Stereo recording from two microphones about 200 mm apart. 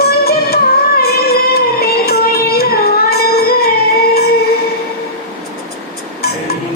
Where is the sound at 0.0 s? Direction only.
50° left (ahead or behind).